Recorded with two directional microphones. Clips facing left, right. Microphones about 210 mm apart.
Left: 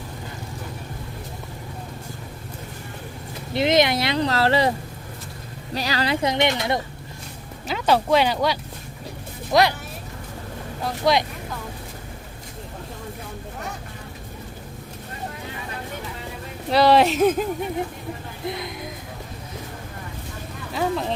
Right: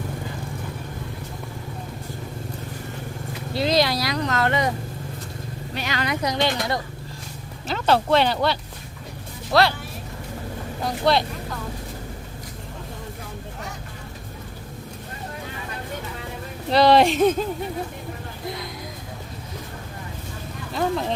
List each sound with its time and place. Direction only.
3.5 s speech: 20° left (ahead or behind)
5.7 s speech: 35° left (ahead or behind)
7.7 s speech: 10° left (ahead or behind)
10.8 s speech: 10° left (ahead or behind)
16.7 s speech: 5° left (ahead or behind)
18.4 s speech: 25° left (ahead or behind)
20.7 s speech: centre (ahead or behind)